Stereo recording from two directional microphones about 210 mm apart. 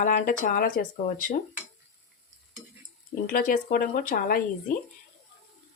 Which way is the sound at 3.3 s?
40° left (ahead or behind).